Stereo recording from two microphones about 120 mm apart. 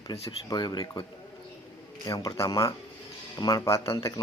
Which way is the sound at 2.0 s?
30° left (ahead or behind).